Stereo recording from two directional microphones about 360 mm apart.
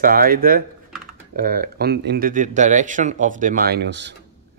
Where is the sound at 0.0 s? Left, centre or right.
Right.